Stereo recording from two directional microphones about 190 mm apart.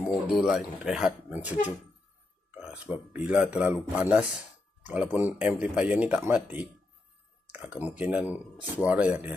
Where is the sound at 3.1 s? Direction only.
5° right (ahead or behind).